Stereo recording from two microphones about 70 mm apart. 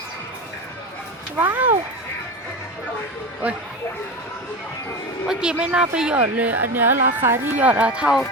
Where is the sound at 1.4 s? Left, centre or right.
Right.